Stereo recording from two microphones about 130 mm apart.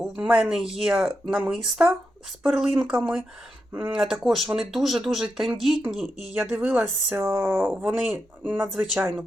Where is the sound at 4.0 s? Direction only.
Centre (ahead or behind).